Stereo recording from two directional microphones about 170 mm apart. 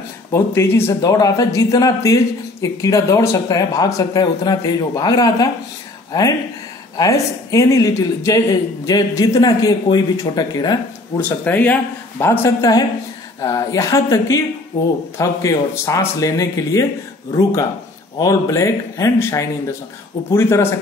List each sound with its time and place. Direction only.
0.3 s speech: 15° left (ahead or behind)
7.0 s speech: 20° left (ahead or behind)
11.1 s speech: 10° left (ahead or behind)